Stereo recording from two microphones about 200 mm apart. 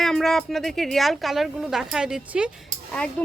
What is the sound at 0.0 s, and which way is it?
Speech, centre (ahead or behind).